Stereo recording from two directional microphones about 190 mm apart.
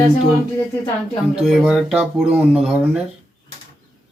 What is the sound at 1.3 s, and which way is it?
A man's voice, 5° right (ahead or behind).